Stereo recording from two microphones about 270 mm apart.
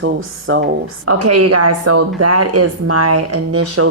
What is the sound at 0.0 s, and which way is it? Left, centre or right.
A woman's voice, right.